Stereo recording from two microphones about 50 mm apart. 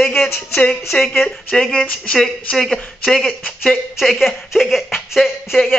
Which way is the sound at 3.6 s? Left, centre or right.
Centre.